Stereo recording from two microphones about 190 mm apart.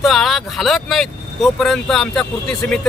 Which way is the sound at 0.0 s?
Centre (ahead or behind).